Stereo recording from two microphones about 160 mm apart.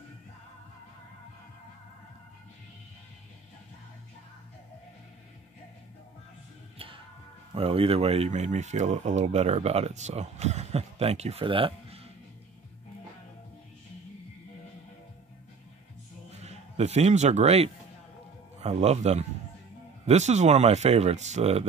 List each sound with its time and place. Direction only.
7.5 s speech: 35° right (ahead or behind)
16.3 s music: 45° right (ahead or behind)
18.6 s speech: 40° right (ahead or behind)